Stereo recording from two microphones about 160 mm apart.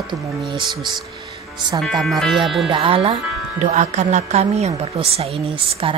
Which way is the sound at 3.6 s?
50° right (ahead or behind).